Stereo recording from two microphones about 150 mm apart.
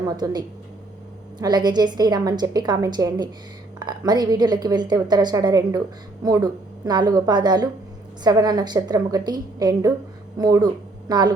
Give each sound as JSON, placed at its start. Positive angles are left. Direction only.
{"t": 0.2, "sound": "a woman's voice", "side_deg": -25}
{"t": 1.4, "sound": "a woman's voice", "side_deg": -30}